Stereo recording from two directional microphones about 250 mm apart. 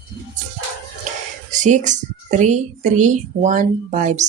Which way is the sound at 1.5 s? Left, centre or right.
Right.